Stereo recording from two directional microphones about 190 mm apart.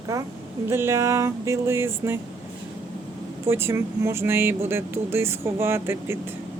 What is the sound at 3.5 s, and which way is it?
Speech, 10° right (ahead or behind).